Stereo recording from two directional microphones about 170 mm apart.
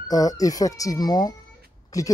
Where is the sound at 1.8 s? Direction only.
20° left (ahead or behind).